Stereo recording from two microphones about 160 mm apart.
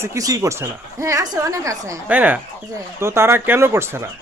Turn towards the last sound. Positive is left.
turn(degrees=-15)  # may be behind; listen again after turning